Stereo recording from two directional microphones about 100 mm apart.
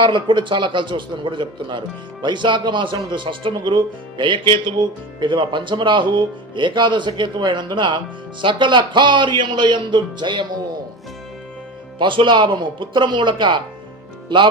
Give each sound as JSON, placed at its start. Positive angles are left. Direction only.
{"t": 0.0, "sound": "speech", "side_deg": -55}
{"t": 11.9, "sound": "speech", "side_deg": -55}